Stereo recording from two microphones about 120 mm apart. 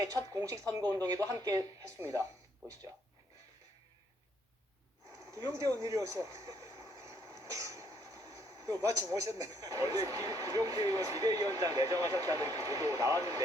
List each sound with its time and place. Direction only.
0.2 s a woman's voice: 30° right (ahead or behind)
5.2 s speech: 25° right (ahead or behind)